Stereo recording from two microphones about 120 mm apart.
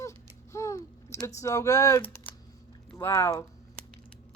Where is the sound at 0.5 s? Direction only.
25° left (ahead or behind).